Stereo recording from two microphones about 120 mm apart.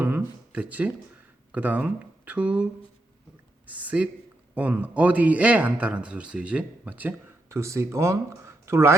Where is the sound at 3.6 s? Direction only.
10° right (ahead or behind).